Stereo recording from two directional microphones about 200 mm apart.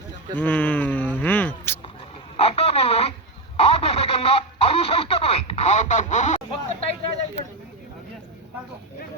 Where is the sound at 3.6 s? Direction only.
30° left (ahead or behind).